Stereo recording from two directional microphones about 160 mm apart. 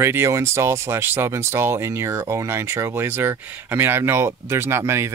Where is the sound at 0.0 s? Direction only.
15° right (ahead or behind).